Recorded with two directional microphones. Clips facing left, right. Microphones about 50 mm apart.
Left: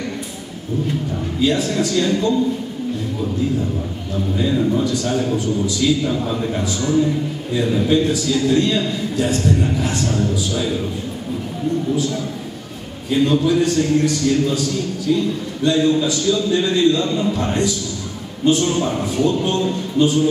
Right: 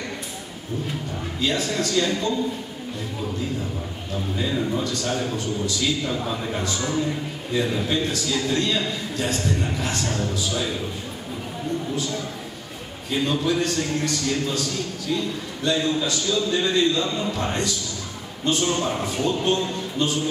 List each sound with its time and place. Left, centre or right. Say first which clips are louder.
1.4 s a man's voice: left 6 dB; centre
4.4 s a man's voice: left 7 dB; centre
13.1 s a man's voice: left 7 dB; centre